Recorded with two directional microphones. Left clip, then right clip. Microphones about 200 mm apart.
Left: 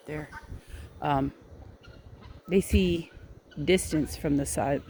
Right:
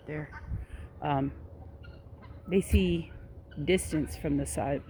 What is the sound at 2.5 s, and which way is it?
Speech, 15° left (ahead or behind).